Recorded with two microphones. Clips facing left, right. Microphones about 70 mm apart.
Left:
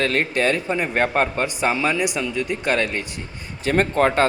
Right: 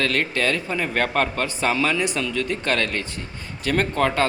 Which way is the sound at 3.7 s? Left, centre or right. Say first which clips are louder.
Left 3 dB; left.